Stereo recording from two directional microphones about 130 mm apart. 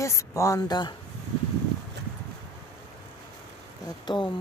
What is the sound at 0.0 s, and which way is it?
Speech, 20° left (ahead or behind).